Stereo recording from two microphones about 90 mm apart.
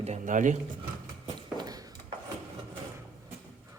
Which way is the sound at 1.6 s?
45° right (ahead or behind).